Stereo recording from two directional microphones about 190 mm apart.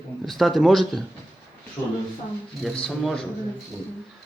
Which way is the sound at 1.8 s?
10° left (ahead or behind).